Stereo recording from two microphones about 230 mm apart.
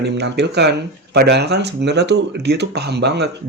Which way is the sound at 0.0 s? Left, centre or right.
Right.